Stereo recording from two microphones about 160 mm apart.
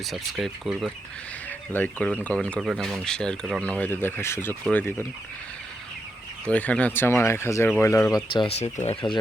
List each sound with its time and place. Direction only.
0.0 s speech: centre (ahead or behind)
1.5 s speech: 10° left (ahead or behind)
6.4 s speech: 10° left (ahead or behind)
8.3 s speech: 35° left (ahead or behind)